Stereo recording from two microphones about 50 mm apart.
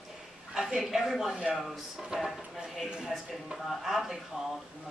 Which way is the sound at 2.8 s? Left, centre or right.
Centre.